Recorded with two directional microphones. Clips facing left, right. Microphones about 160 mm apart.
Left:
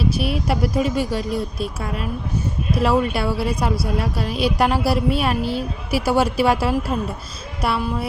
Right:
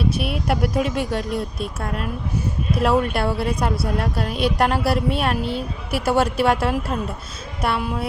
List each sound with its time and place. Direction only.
0.0 s a woman's voice: centre (ahead or behind)